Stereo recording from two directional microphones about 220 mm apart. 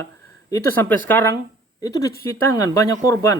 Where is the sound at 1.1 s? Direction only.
10° left (ahead or behind).